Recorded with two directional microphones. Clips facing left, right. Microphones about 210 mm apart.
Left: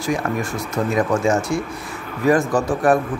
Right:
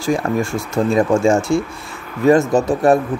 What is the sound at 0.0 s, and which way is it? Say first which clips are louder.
Speech: right 4 dB; 30° right (ahead or behind).